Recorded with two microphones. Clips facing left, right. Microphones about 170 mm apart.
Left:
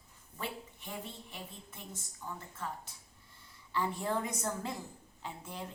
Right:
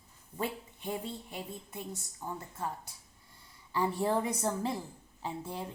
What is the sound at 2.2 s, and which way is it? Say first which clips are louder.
Speech: right 4 dB; 40° right (ahead or behind).